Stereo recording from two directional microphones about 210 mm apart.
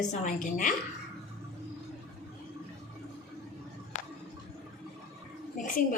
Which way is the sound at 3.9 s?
35° left (ahead or behind).